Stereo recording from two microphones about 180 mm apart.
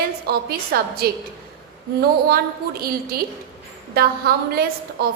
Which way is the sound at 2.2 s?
60° right (ahead or behind).